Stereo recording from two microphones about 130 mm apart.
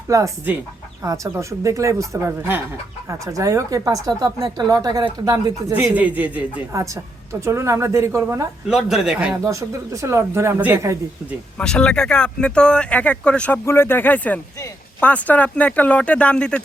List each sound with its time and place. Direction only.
0.1 s speech: 25° right (ahead or behind)
5.7 s a man's voice: 10° right (ahead or behind)
6.7 s speech: 25° right (ahead or behind)
8.7 s speech: 5° right (ahead or behind)
9.5 s speech: 25° right (ahead or behind)
11.5 s speech: 5° left (ahead or behind)